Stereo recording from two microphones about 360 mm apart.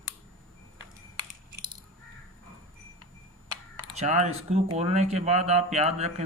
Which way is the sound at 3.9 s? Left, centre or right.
Centre.